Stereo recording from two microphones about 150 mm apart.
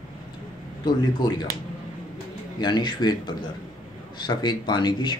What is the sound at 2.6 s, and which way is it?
Speech, 30° left (ahead or behind).